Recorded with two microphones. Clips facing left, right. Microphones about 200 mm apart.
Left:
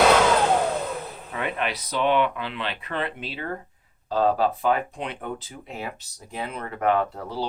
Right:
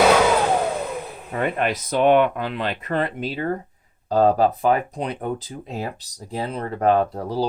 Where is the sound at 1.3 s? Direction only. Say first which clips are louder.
Right 6 dB; 45° right (ahead or behind).